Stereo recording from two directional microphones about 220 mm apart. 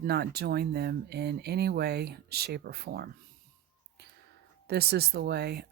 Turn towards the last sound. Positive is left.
turn(degrees=-45)  # may be behind; listen again after turning